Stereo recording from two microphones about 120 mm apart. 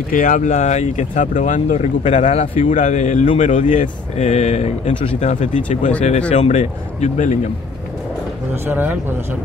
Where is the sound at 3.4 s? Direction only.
90° left.